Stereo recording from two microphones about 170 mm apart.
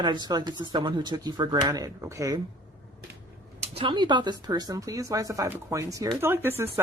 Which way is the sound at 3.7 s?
30° right (ahead or behind).